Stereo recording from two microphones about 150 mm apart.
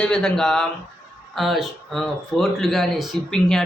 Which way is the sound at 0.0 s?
5° left (ahead or behind).